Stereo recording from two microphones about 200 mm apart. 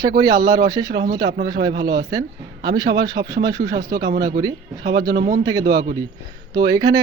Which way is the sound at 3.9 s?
55° right (ahead or behind).